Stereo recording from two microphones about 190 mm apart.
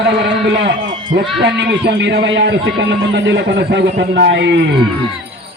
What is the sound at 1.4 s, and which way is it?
A man's voice, 65° right (ahead or behind).